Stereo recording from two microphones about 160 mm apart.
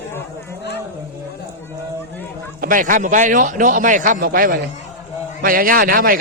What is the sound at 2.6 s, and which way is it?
A man's voice, 60° right (ahead or behind).